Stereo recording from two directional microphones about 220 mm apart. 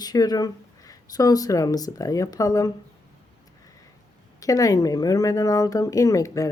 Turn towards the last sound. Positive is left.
turn(degrees=15)  # may be behind; listen again after turning